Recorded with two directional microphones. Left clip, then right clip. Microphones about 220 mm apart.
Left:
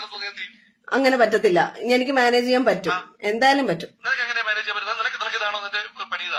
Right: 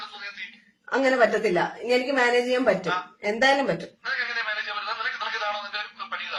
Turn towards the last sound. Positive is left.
turn(degrees=50)  # may be behind; listen again after turning